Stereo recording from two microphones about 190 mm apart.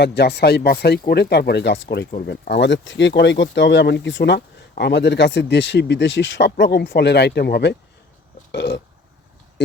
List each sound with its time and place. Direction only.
0.0 s speech: 60° left (ahead or behind)